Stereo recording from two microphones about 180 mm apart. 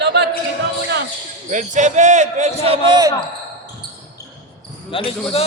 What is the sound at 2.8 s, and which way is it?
Speech, 25° right (ahead or behind).